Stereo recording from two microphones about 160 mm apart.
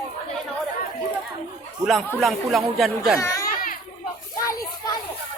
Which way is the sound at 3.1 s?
20° left (ahead or behind).